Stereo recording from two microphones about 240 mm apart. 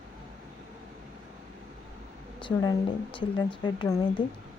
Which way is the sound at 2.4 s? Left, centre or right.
Centre.